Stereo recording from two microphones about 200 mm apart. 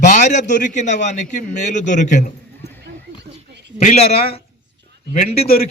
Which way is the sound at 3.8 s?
35° left (ahead or behind).